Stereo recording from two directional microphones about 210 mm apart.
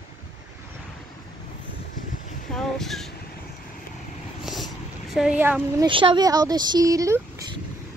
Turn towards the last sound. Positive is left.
turn(degrees=-15)  # may be behind; listen again after turning